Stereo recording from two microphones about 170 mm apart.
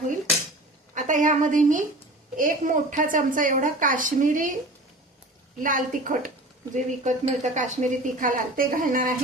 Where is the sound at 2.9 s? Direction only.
50° right (ahead or behind).